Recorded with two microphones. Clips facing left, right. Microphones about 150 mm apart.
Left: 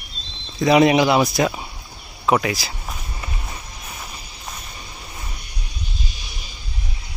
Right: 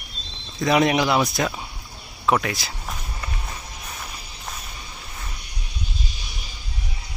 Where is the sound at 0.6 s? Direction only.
5° left (ahead or behind).